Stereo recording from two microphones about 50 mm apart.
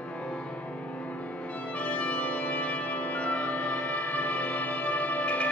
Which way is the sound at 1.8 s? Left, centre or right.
Left.